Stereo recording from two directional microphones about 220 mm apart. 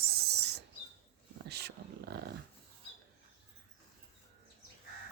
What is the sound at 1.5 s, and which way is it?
Dog, 50° right (ahead or behind).